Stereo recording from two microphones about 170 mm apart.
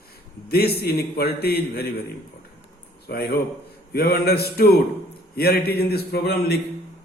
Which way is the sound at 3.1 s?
65° left (ahead or behind).